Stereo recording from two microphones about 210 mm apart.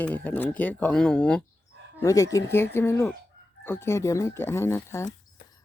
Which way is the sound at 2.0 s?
15° left (ahead or behind).